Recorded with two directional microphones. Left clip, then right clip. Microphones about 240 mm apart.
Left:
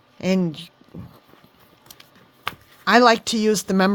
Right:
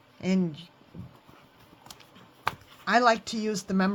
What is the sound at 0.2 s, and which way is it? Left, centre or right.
Speech, left.